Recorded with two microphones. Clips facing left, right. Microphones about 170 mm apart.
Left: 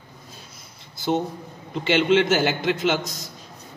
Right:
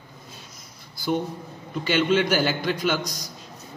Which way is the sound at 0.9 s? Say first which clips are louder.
Left 2 dB; 25° left (ahead or behind).